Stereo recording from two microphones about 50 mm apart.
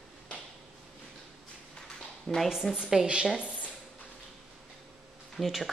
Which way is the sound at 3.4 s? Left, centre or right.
Right.